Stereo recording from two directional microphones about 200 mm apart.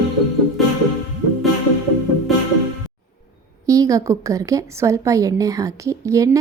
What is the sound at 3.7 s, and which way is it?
A woman's voice, 15° right (ahead or behind).